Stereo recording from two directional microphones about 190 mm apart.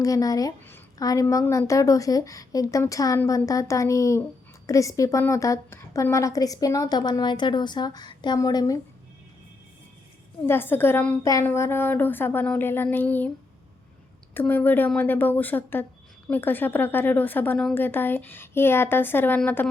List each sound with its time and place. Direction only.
0.0 s a woman's voice: 20° left (ahead or behind)
10.4 s a woman's voice: 10° left (ahead or behind)
14.3 s a woman's voice: 10° left (ahead or behind)